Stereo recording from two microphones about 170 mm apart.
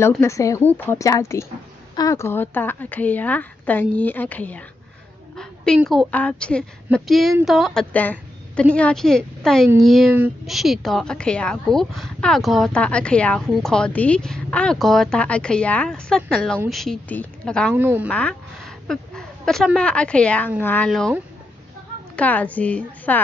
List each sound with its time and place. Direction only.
0.2 s a woman's voice: 15° left (ahead or behind)
5.3 s a sound: 5° left (ahead or behind)
5.9 s a woman's voice: 5° left (ahead or behind)
17.7 s speech: 10° right (ahead or behind)
18.0 s a woman's voice: 10° left (ahead or behind)
22.1 s a woman's voice: 10° left (ahead or behind)